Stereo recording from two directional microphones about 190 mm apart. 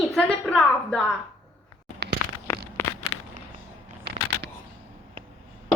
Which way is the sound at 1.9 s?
60° right (ahead or behind).